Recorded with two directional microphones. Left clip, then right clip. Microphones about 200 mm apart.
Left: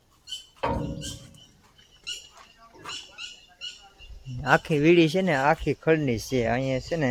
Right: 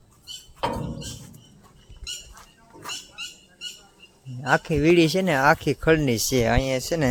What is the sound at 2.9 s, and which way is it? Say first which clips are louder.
Rodents: right 3 dB; 60° right (ahead or behind).